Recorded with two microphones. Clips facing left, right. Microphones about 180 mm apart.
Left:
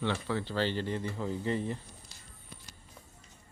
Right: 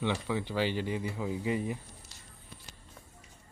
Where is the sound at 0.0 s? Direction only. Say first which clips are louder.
Right 1 dB; 15° right (ahead or behind).